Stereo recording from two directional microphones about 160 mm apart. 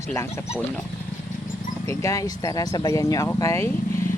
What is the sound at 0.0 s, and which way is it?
Speech, 15° left (ahead or behind).